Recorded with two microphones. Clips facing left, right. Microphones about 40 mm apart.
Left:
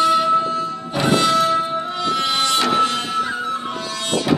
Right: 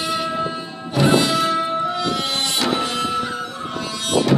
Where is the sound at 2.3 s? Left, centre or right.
Left.